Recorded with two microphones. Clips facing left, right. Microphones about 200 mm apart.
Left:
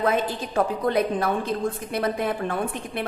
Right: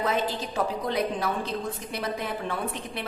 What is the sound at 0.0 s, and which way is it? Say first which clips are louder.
A woman's voice: left 4 dB; 55° left (ahead or behind).